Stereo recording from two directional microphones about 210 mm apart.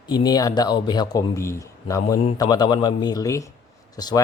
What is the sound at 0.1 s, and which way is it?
Speech, 20° left (ahead or behind).